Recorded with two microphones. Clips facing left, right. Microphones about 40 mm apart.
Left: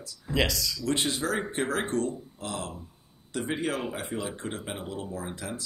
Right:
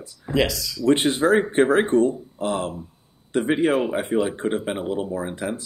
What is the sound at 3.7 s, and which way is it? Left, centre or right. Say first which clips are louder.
Speech: right 10 dB; centre.